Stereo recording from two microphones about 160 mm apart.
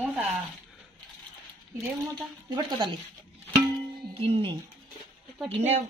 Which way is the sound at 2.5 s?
25° right (ahead or behind).